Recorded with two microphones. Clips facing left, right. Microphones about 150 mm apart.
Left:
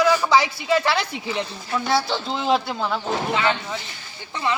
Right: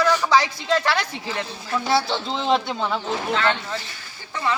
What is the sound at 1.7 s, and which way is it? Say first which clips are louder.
Speech: even; centre (ahead or behind).